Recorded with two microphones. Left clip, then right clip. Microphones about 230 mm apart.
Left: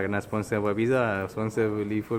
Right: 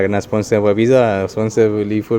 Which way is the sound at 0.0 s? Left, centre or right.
Right.